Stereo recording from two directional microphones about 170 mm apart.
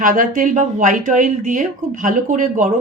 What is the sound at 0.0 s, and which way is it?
A woman's voice, 50° right (ahead or behind).